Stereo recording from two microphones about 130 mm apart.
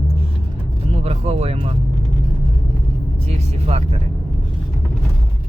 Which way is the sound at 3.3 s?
55° right (ahead or behind).